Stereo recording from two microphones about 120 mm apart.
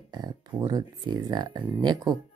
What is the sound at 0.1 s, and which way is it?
Speech, 35° right (ahead or behind).